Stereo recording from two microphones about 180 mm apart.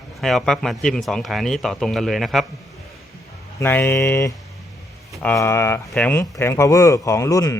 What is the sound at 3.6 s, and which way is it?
Speech, 10° left (ahead or behind).